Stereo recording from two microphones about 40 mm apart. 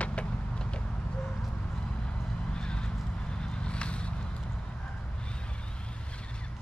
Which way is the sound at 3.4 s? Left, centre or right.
Left.